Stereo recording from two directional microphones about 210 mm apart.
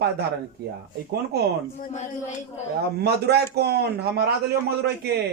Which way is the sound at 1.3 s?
50° right (ahead or behind).